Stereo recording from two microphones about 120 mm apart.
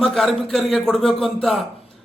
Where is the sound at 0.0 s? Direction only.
Centre (ahead or behind).